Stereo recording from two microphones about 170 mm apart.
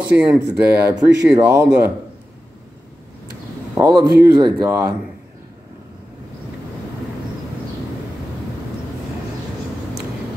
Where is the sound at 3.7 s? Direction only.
20° right (ahead or behind).